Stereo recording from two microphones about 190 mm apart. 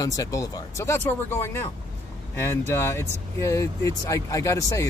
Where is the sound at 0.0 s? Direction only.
15° left (ahead or behind).